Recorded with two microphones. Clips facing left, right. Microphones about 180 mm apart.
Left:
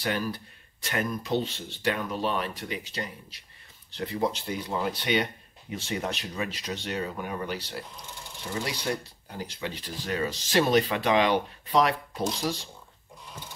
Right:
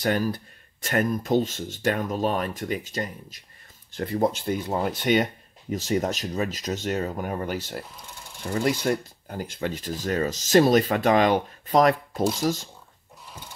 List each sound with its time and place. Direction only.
0.0 s speech: 45° right (ahead or behind)